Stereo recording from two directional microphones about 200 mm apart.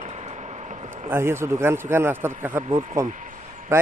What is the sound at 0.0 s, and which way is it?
Vehicle, 35° right (ahead or behind).